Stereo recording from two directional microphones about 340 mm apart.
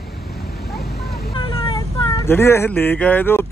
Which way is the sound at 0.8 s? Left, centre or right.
Left.